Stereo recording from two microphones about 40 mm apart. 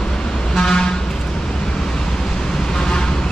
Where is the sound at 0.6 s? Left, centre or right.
Left.